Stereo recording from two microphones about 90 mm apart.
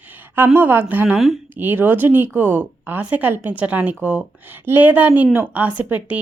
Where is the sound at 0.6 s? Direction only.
20° right (ahead or behind).